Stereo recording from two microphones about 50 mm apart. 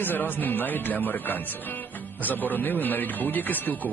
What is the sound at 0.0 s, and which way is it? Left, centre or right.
Speech, left.